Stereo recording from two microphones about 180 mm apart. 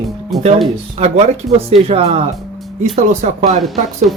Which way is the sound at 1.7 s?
35° right (ahead or behind).